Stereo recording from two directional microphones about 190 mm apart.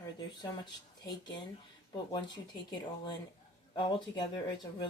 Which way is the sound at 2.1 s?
25° left (ahead or behind).